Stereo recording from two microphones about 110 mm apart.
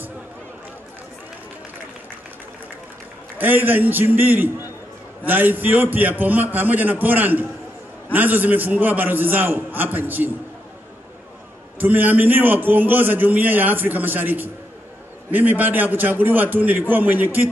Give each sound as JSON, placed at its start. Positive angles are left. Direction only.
{"t": 3.3, "sound": "a man's voice", "side_deg": -15}
{"t": 11.8, "sound": "a man's voice", "side_deg": -15}